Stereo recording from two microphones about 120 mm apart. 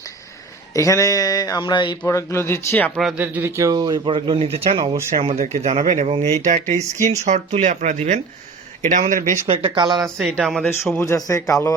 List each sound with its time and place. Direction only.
0.7 s speech: 25° left (ahead or behind)
2.0 s speech: 20° left (ahead or behind)
2.9 s speech: centre (ahead or behind)
3.2 s speech: 20° right (ahead or behind); by 9.4 s 90° right
9.5 s speech: 45° right (ahead or behind)
10.3 s speech: centre (ahead or behind)
11.0 s speech: 25° left (ahead or behind)